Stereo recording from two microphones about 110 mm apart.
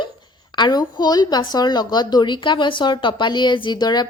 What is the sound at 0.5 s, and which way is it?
A woman's voice, 40° left (ahead or behind).